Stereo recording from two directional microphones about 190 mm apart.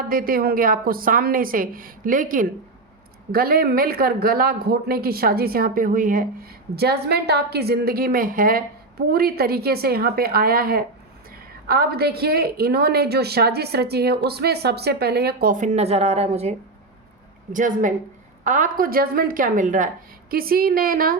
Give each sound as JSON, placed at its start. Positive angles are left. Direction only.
{"t": 0.1, "sound": "a woman's voice", "side_deg": -50}